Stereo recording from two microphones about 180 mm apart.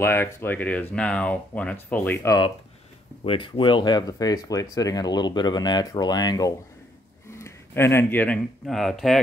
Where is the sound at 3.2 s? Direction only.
30° left (ahead or behind).